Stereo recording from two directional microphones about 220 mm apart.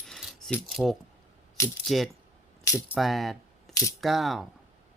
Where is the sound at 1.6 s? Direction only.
15° left (ahead or behind).